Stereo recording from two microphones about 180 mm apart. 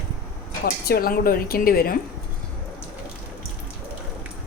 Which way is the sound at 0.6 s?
60° left (ahead or behind).